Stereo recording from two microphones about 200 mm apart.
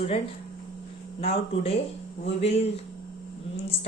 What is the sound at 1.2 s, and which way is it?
Speech, 30° left (ahead or behind).